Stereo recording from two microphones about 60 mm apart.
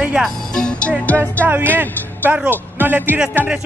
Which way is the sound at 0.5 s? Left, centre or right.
Centre.